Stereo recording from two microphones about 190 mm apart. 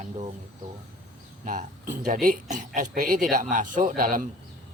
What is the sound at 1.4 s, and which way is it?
Speech, 40° right (ahead or behind).